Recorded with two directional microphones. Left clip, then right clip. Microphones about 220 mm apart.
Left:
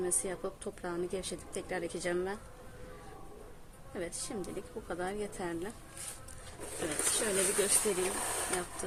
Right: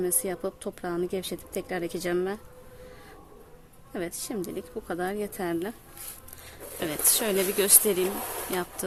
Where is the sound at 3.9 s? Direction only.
50° right (ahead or behind).